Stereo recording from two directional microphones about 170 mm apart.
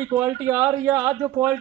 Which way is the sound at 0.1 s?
15° right (ahead or behind).